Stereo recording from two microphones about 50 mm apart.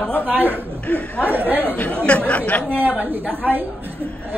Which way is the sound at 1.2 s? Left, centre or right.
Right.